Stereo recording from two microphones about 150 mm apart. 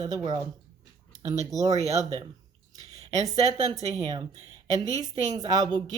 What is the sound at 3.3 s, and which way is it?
Speech, 25° right (ahead or behind).